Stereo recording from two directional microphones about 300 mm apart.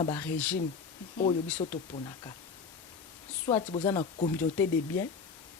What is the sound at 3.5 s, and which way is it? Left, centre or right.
Speech, centre.